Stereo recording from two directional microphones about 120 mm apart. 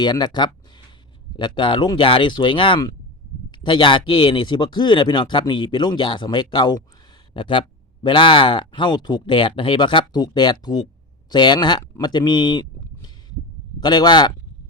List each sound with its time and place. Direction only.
0.0 s speech: 35° left (ahead or behind)